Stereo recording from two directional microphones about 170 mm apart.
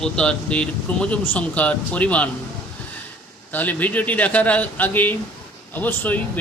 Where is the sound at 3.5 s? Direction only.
10° left (ahead or behind).